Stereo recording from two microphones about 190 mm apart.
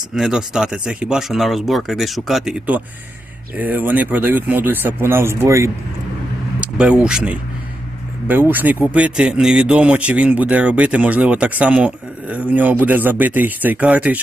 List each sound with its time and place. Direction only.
0.1 s speech: 5° right (ahead or behind)